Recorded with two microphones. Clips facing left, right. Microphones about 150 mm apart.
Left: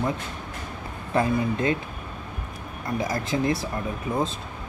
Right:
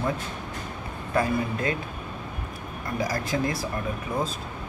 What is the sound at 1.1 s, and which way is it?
Speech, 25° left (ahead or behind).